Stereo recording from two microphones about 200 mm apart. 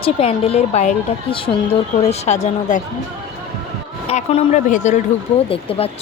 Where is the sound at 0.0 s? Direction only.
30° left (ahead or behind).